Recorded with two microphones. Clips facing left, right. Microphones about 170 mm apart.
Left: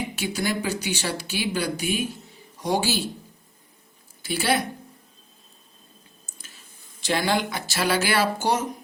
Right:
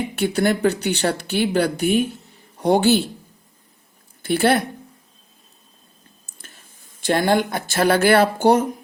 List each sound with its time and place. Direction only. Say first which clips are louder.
0.2 s speech: right 10 dB; 60° right (ahead or behind)
4.2 s speech: right 7 dB; 55° right (ahead or behind)
7.0 s speech: right 6 dB; 55° right (ahead or behind)